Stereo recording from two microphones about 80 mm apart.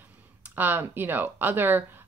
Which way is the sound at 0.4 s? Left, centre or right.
Right.